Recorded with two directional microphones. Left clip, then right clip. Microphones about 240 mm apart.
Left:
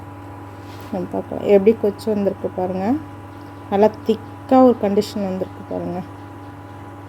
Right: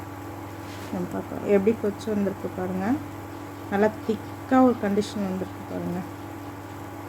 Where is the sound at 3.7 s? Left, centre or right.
Centre.